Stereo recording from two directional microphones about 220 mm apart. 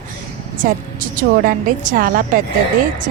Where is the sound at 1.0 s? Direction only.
35° right (ahead or behind).